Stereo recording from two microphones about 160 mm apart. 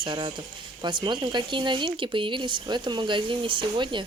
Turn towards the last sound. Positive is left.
turn(degrees=-30)  # may be behind; listen again after turning